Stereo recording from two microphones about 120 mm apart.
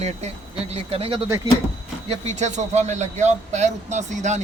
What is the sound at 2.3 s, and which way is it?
Speech, 80° right.